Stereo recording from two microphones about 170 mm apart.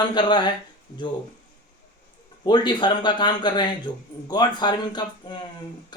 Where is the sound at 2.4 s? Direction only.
25° left (ahead or behind).